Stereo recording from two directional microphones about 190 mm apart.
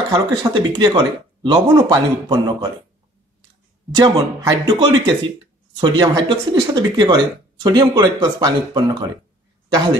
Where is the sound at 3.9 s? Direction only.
20° right (ahead or behind).